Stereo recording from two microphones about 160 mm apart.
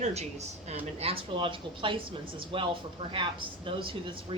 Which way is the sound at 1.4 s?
30° right (ahead or behind).